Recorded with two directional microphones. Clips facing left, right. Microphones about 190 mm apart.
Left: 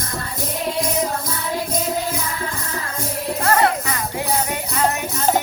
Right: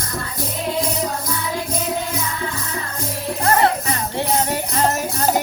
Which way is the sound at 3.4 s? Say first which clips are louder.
Right 1 dB; 25° right (ahead or behind).